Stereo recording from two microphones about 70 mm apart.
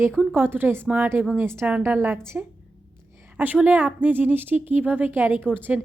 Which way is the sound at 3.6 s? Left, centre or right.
Right.